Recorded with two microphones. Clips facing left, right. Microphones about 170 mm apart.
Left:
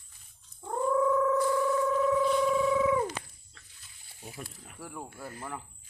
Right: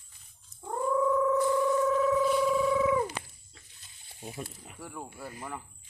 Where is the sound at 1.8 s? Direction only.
Centre (ahead or behind).